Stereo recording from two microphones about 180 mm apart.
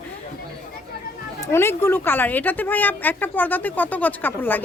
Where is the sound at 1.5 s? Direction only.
15° left (ahead or behind).